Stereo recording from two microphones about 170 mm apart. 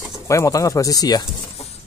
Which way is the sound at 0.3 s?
20° left (ahead or behind).